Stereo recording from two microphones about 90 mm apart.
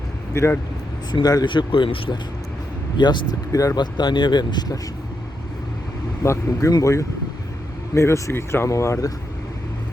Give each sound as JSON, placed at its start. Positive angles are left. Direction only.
{"t": 0.3, "sound": "speech", "side_deg": 30}
{"t": 1.1, "sound": "speech", "side_deg": 45}
{"t": 3.0, "sound": "speech", "side_deg": 60}
{"t": 3.5, "sound": "speech", "side_deg": 40}
{"t": 3.8, "sound": "speech", "side_deg": 55}
{"t": 6.2, "sound": "speech", "side_deg": 30}